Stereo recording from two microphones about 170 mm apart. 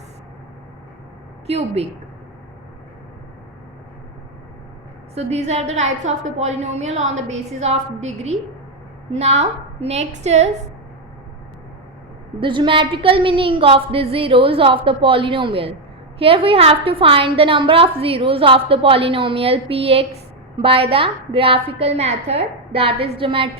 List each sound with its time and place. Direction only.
1.5 s a woman's voice: 35° right (ahead or behind)
5.1 s a woman's voice: 40° right (ahead or behind)
12.4 s a woman's voice: 30° right (ahead or behind)